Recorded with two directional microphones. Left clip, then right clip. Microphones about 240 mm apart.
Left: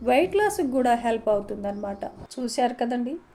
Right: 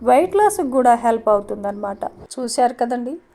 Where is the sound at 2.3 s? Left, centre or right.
Right.